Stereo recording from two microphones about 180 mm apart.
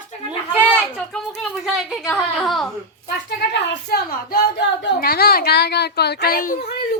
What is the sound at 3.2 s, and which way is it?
Speech, 60° left (ahead or behind).